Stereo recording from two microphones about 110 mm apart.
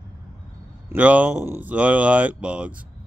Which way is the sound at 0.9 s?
15° right (ahead or behind).